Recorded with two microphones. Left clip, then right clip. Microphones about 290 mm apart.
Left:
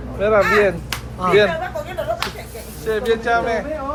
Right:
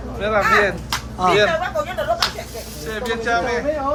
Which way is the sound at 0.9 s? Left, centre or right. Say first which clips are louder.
Right 1 dB; centre.